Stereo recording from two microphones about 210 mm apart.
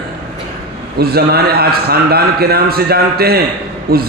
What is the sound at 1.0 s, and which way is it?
A man's voice, 50° right (ahead or behind).